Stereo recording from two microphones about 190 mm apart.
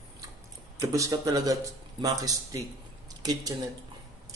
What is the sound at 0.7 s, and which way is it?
Speech, 15° right (ahead or behind).